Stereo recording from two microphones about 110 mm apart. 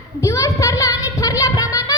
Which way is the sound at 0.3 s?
30° left (ahead or behind).